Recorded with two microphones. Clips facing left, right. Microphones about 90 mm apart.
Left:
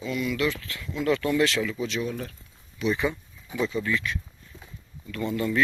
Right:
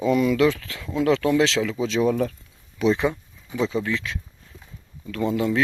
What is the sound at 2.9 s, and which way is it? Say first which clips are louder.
Speech: right 4 dB; 70° right (ahead or behind).